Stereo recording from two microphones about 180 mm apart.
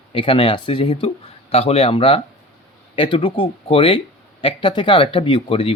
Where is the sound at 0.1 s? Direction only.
30° left (ahead or behind).